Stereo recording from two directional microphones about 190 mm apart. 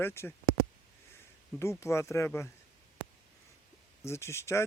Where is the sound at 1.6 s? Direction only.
15° left (ahead or behind).